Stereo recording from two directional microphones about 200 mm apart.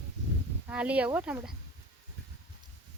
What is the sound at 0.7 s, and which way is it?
Speech, 5° right (ahead or behind).